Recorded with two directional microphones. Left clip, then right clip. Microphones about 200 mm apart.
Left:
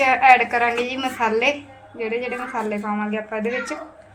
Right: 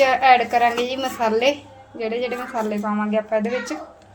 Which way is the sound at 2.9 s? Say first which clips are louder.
Right 4 dB; 35° right (ahead or behind).